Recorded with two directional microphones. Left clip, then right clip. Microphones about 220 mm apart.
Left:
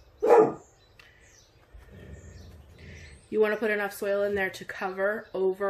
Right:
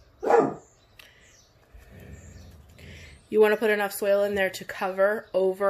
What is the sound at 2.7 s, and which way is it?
Speech, 40° right (ahead or behind).